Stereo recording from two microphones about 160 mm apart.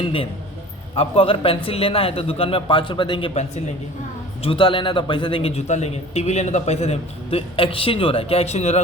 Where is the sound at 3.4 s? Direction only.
45° left (ahead or behind).